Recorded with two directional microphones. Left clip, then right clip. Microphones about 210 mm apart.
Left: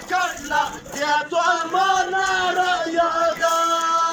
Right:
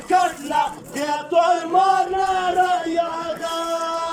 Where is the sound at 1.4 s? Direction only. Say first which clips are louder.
Right 5 dB; 25° right (ahead or behind).